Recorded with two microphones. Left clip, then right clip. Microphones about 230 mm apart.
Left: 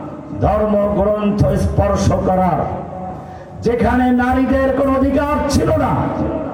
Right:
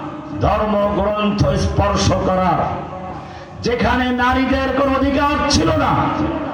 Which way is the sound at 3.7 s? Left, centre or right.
Left.